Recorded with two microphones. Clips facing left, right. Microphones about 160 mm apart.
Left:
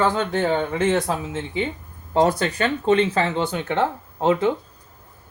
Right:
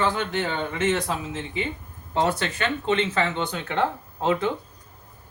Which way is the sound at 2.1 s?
40° left (ahead or behind).